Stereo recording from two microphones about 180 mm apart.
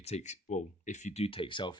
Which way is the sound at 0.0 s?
40° left (ahead or behind).